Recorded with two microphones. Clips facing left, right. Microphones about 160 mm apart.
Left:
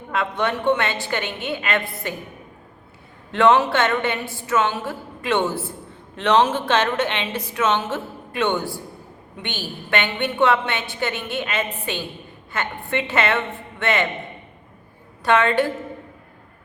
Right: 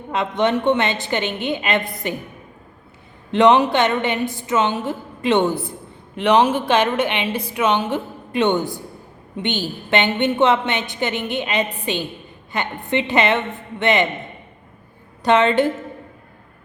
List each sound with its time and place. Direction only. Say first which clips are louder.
0.1 s a woman's voice: right 4 dB; 20° right (ahead or behind)
3.3 s a woman's voice: right 3 dB; 20° right (ahead or behind)
15.2 s a woman's voice: right 3 dB; 20° right (ahead or behind)